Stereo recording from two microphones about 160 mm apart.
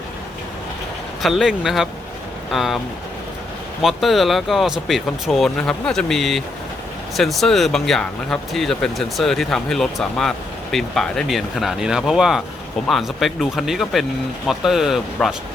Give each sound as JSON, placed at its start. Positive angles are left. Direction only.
{"t": 1.2, "sound": "speech", "side_deg": 0}
{"t": 3.8, "sound": "speech", "side_deg": 0}